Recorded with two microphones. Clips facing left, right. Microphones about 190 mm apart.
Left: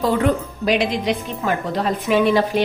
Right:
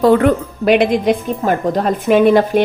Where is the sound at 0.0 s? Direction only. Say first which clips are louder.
Right 7 dB; 60° right (ahead or behind).